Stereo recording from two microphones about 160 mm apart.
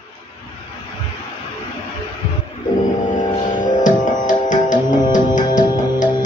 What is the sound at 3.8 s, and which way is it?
Music, 50° left (ahead or behind).